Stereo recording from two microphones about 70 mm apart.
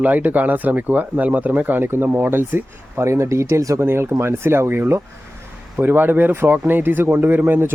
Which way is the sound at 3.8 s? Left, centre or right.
Right.